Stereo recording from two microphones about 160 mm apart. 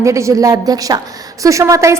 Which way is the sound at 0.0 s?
20° right (ahead or behind).